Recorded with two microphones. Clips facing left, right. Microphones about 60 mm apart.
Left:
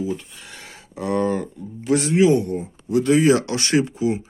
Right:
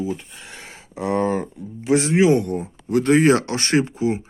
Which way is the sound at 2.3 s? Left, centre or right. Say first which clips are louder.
Even; right.